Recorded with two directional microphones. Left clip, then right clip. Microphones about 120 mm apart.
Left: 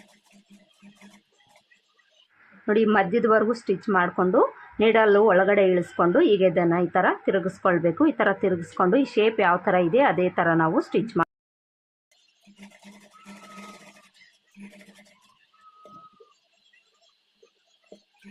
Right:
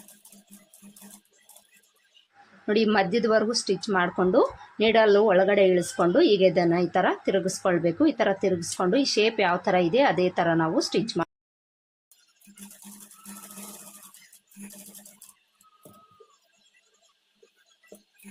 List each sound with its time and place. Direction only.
2.6 s a woman's voice: 15° right (ahead or behind)
3.2 s a woman's voice: 10° right (ahead or behind)
3.9 s a woman's voice: 25° right (ahead or behind)
8.5 s a woman's voice: 5° right (ahead or behind)
10.8 s speech: 5° right (ahead or behind)